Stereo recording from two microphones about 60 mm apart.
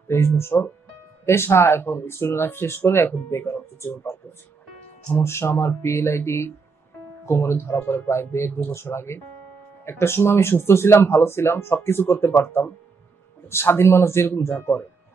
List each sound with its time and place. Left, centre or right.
0.1 s speech: left
8.5 s speech: left
8.7 s speech: left